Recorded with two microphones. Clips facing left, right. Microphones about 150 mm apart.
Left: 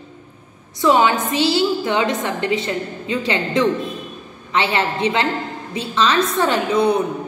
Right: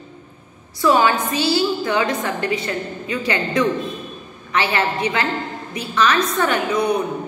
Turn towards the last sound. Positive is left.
turn(degrees=30)  # may be behind; listen again after turning